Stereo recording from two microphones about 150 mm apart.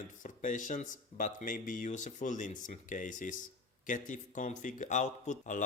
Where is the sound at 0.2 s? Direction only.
60° left (ahead or behind).